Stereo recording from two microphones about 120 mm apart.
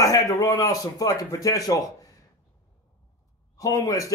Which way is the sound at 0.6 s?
30° left (ahead or behind).